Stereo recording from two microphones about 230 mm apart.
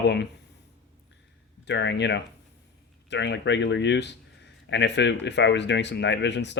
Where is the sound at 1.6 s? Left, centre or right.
Left.